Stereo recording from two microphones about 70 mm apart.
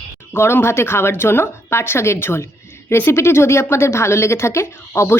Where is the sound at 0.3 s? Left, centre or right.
Left.